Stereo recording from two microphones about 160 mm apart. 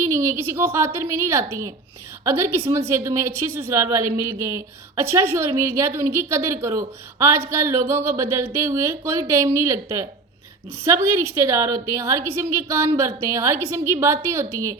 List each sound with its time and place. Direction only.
0.0 s a woman's voice: 20° right (ahead or behind)